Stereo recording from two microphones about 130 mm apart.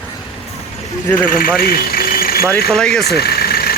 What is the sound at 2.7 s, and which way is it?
Speech, 5° left (ahead or behind).